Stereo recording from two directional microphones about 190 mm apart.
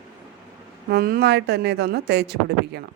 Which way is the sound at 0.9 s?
55° right (ahead or behind).